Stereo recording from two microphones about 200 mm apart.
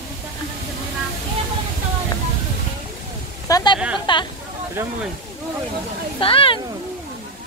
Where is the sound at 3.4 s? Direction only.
20° left (ahead or behind).